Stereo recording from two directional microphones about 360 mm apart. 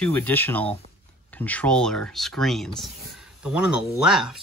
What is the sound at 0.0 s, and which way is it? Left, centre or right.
Speech, centre.